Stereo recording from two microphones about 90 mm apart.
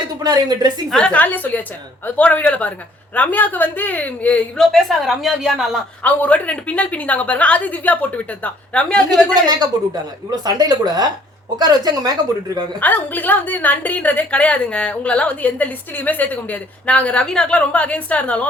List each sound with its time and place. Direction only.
0.2 s a woman's voice: 45° right (ahead or behind)
0.9 s a woman's voice: 10° left (ahead or behind)
4.5 s a woman's voice: 5° left (ahead or behind)
6.0 s a woman's voice: 20° left (ahead or behind)
9.0 s a woman's voice: 50° right (ahead or behind)
12.8 s a woman's voice: 20° left (ahead or behind)